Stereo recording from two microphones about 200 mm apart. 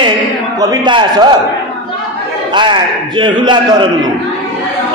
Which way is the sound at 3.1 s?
25° right (ahead or behind).